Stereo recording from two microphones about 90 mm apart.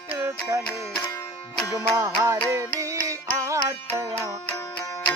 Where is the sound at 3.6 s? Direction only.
35° right (ahead or behind).